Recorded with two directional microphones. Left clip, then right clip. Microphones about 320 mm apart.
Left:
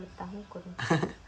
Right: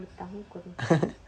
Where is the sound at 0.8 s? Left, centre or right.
Centre.